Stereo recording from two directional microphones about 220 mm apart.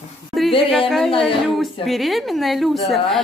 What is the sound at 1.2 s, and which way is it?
Speech, centre (ahead or behind).